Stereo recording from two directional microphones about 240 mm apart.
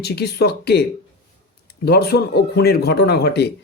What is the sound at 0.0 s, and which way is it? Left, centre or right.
A man's voice, left.